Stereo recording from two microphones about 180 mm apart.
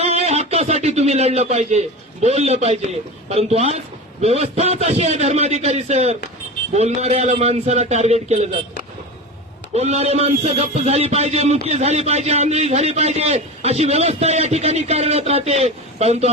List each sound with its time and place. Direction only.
0.0 s a man's voice: 35° right (ahead or behind)
9.7 s a man's voice: 35° right (ahead or behind)